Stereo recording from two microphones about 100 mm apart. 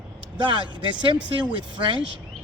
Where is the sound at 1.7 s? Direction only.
55° right (ahead or behind).